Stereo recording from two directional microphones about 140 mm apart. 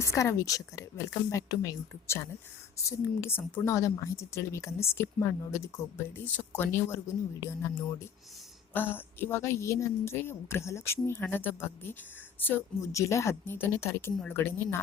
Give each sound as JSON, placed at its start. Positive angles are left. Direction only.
{"t": 0.0, "sound": "a woman's voice", "side_deg": 20}